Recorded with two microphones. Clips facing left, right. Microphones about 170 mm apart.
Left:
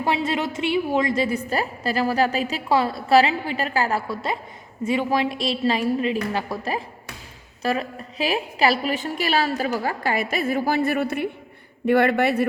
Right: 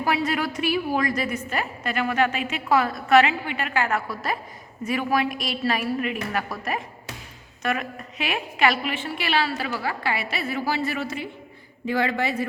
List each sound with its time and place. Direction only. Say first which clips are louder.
0.0 s a woman's voice: left 1 dB; 25° left (ahead or behind); by 12.5 s 65° left (ahead or behind)